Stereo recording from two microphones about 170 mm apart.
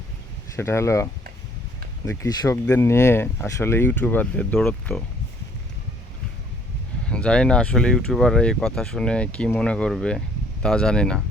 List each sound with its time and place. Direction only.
0.5 s speech: 15° left (ahead or behind)
2.0 s speech: 20° left (ahead or behind)
7.1 s speech: 5° left (ahead or behind)